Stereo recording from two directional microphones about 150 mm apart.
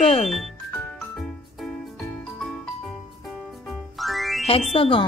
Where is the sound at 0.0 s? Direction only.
35° left (ahead or behind).